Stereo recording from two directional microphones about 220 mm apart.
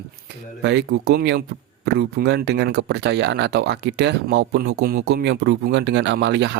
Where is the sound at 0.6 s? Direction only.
50° right (ahead or behind).